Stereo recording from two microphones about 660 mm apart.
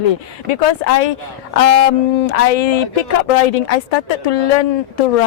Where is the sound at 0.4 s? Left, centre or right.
Left.